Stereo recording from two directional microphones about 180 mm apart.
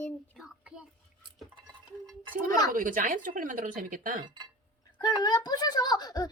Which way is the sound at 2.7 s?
50° right (ahead or behind).